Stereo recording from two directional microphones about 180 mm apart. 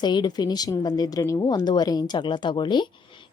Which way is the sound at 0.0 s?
25° left (ahead or behind).